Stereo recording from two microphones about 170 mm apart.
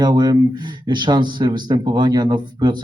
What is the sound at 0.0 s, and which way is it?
Speech, 25° right (ahead or behind).